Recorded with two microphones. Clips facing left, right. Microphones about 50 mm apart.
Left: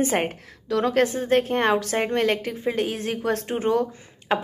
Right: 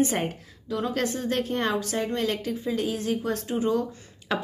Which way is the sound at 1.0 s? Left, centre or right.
Left.